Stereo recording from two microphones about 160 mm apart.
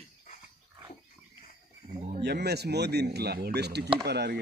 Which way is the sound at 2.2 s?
90° right.